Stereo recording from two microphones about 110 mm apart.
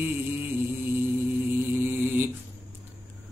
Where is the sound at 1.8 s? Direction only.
20° right (ahead or behind).